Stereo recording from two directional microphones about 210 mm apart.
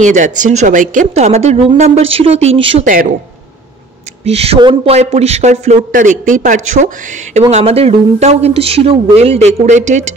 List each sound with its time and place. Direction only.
0.0 s speech: 35° right (ahead or behind)
2.8 s speech: 40° right (ahead or behind)
4.2 s speech: 30° right (ahead or behind)